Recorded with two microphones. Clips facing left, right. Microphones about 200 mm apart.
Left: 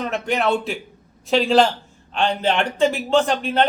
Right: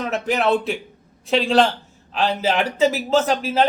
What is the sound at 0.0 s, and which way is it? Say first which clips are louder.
Speech: right 1 dB; centre (ahead or behind).